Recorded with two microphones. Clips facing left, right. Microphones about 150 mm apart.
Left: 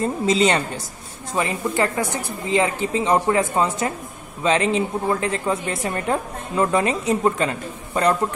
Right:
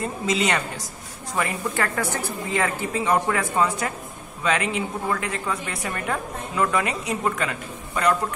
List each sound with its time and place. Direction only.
0.0 s a woman's voice: 30° left (ahead or behind)